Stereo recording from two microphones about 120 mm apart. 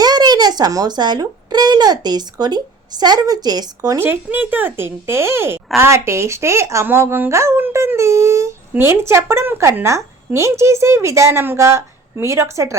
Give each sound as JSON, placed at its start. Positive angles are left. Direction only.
{"t": 0.0, "sound": "speech", "side_deg": -35}
{"t": 3.9, "sound": "a woman's voice", "side_deg": -15}